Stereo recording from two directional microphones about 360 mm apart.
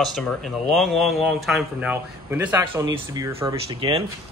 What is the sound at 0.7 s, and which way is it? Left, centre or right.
A man's voice, centre.